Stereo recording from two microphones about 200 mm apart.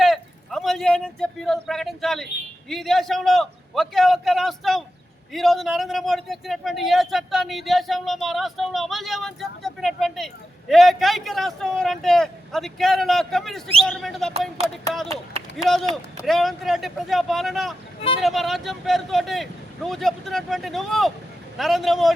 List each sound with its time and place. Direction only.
0.0 s a man's voice: centre (ahead or behind)
15.1 s speech: 30° right (ahead or behind)
15.5 s a man's voice: centre (ahead or behind)